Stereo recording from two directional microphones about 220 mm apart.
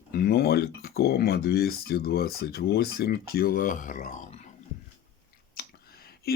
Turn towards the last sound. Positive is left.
turn(degrees=45)  # may be behind; listen again after turning